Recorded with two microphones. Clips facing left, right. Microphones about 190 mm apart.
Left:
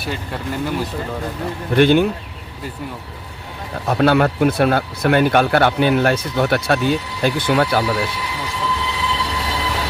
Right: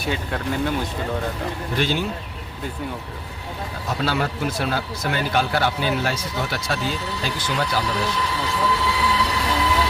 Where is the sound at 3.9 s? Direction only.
60° left (ahead or behind).